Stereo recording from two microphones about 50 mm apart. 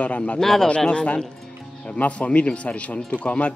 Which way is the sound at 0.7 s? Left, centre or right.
Centre.